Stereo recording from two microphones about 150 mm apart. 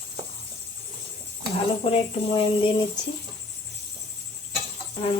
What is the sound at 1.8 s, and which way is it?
Speech, 40° left (ahead or behind).